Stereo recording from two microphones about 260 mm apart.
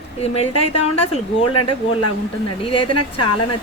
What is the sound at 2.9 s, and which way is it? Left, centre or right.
Speech, left.